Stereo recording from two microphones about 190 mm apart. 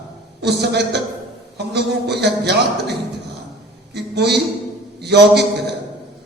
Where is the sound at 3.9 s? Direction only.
60° right (ahead or behind).